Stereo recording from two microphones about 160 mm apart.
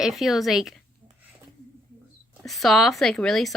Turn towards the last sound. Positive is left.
turn(degrees=5)  # may be behind; listen again after turning